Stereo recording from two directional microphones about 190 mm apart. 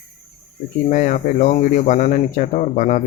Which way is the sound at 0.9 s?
45° left (ahead or behind).